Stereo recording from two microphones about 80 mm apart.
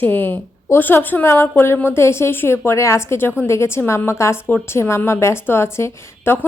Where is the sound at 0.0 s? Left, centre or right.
Left.